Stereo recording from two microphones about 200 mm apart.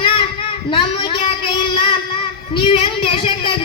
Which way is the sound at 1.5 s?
25° left (ahead or behind).